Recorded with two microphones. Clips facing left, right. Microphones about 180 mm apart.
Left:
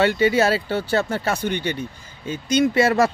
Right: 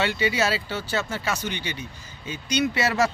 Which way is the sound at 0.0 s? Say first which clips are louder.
Left 7 dB; 50° left (ahead or behind).